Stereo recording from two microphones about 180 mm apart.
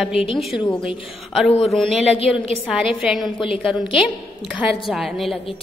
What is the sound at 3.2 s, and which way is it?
Speech, 25° left (ahead or behind).